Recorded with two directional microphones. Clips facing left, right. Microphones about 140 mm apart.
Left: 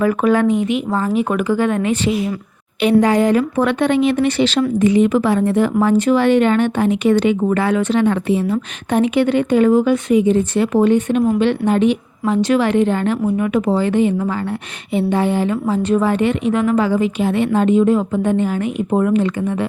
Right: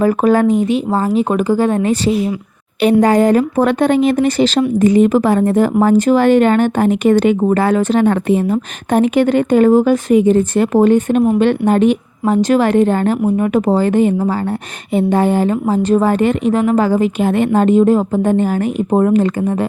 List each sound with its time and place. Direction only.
0.0 s speech: 35° right (ahead or behind)